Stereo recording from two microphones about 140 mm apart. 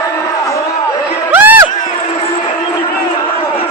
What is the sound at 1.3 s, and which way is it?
Music, 15° right (ahead or behind).